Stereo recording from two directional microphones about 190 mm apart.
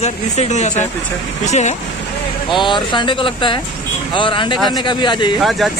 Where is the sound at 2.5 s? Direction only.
25° left (ahead or behind).